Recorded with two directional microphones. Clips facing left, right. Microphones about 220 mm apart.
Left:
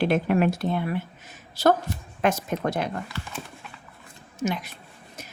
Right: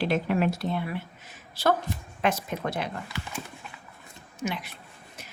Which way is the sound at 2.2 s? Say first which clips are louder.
Left 3 dB; 45° left (ahead or behind).